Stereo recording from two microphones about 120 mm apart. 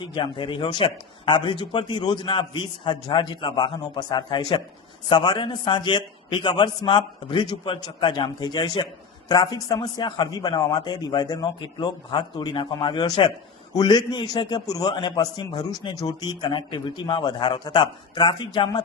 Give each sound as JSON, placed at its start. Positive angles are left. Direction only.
{"t": 0.1, "sound": "a man's voice", "side_deg": 45}